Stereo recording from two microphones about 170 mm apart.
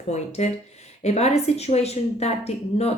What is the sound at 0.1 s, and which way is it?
A woman's voice, 40° left (ahead or behind).